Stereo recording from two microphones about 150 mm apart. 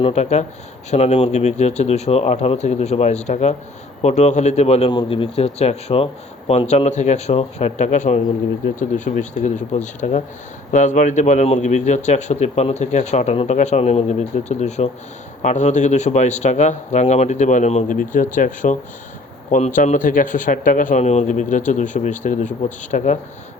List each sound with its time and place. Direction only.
0.0 s a man's voice: 45° left (ahead or behind)
4.9 s a man's voice: 35° left (ahead or behind); by 23.1 s 55° left (ahead or behind)